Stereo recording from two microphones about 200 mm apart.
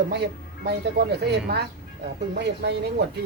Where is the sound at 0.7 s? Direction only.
55° right (ahead or behind).